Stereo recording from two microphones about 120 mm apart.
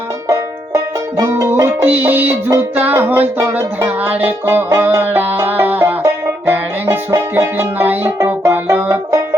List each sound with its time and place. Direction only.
0.3 s music: 25° right (ahead or behind)
8.7 s banjo: 15° right (ahead or behind)